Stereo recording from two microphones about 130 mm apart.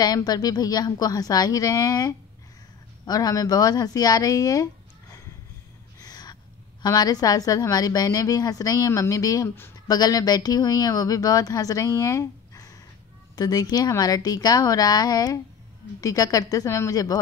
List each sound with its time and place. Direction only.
0.0 s speech: 30° left (ahead or behind)
5.9 s a sound: 30° left (ahead or behind)
6.8 s speech: 30° left (ahead or behind)